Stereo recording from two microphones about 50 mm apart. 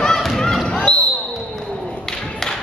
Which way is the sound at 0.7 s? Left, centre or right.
Centre.